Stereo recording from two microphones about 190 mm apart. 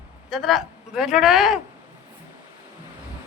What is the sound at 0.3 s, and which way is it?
Speech, centre (ahead or behind).